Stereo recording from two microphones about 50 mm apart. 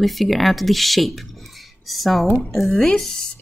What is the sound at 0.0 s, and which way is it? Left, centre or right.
Speech, centre.